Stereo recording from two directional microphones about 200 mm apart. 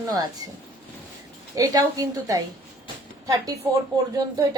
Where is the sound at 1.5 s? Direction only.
15° right (ahead or behind).